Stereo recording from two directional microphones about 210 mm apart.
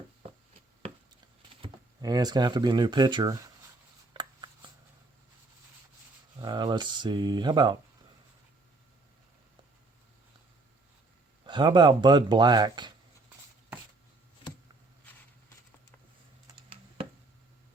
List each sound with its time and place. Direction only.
1.6 s speech: 20° right (ahead or behind)
4.1 s a sound: 20° right (ahead or behind)
6.4 s speech: 20° right (ahead or behind)
11.4 s speech: 20° right (ahead or behind)